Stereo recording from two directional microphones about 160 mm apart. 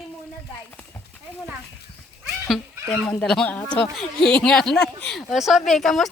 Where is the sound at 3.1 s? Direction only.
5° left (ahead or behind).